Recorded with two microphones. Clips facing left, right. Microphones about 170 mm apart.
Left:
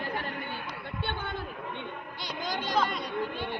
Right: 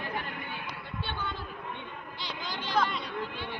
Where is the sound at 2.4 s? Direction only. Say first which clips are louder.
Left 1 dB; 45° left (ahead or behind).